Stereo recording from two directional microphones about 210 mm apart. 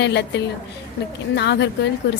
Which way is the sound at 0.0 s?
55° left (ahead or behind).